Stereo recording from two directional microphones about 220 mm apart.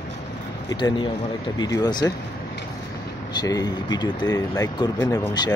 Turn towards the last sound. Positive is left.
turn(degrees=20)  # may be behind; listen again after turning